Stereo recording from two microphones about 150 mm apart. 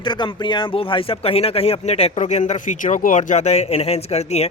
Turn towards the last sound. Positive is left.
turn(degrees=45)  # may be behind; listen again after turning